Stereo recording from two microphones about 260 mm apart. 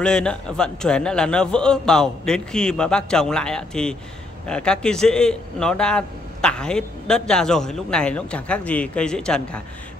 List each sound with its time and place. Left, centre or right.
0.0 s a man's voice: centre